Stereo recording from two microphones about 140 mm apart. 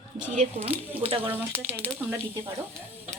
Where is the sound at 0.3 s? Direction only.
50° right (ahead or behind).